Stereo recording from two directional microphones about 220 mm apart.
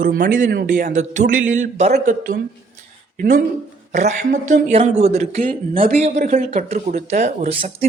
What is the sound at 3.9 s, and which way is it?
Speech, 35° right (ahead or behind).